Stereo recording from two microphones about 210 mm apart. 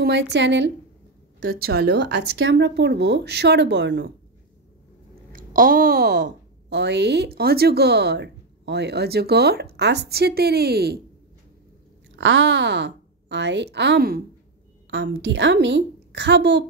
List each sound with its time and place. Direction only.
0.0 s a woman's voice: 55° right (ahead or behind)
5.3 s a woman's voice: 40° right (ahead or behind)
12.2 s a woman's voice: 60° right (ahead or behind)
14.9 s a woman's voice: 65° right (ahead or behind)